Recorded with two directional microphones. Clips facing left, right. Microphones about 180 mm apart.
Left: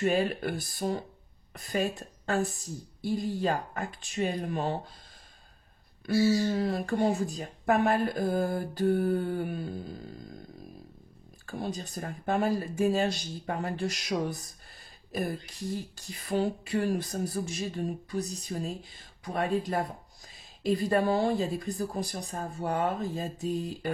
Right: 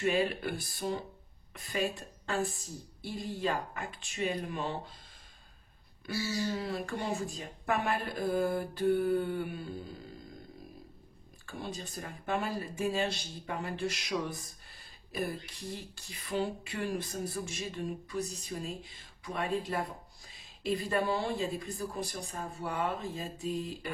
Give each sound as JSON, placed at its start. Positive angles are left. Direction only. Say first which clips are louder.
{"t": 0.0, "sound": "speech", "louder": "left 3 dB", "side_deg": 45}
{"t": 6.2, "sound": "speech", "louder": "left 7 dB", "side_deg": 45}
{"t": 11.4, "sound": "speech", "louder": "left 5 dB", "side_deg": 40}